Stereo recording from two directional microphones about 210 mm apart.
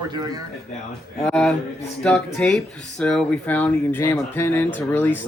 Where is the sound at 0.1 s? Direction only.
20° right (ahead or behind).